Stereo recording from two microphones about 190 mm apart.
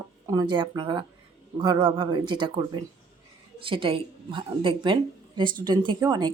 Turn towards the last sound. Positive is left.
turn(degrees=-20)  # may be behind; listen again after turning